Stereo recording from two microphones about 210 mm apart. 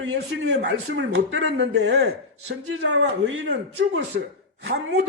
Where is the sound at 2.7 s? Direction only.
65° right (ahead or behind).